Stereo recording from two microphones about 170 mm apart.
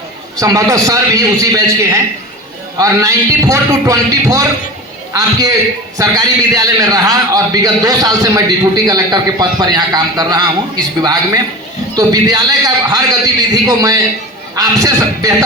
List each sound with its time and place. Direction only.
0.3 s a man's voice: 20° right (ahead or behind)
11.9 s a man's voice: 20° right (ahead or behind)